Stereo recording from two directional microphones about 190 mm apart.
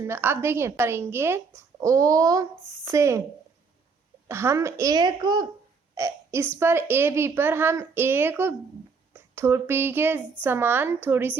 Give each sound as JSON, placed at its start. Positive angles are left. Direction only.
{"t": 0.0, "sound": "a woman's voice", "side_deg": -10}
{"t": 4.3, "sound": "speech", "side_deg": -15}
{"t": 5.9, "sound": "hiccup", "side_deg": -20}
{"t": 6.6, "sound": "a woman's voice", "side_deg": -10}